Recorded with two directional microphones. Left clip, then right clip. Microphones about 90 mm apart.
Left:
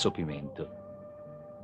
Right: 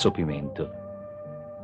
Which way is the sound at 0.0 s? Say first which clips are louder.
Right 6 dB; 15° left (ahead or behind).